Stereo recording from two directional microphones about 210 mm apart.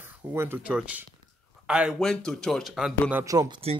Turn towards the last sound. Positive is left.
turn(degrees=-15)  # may be behind; listen again after turning